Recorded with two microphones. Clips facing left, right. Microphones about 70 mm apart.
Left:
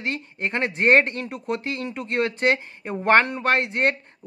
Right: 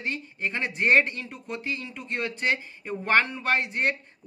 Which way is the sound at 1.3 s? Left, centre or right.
Left.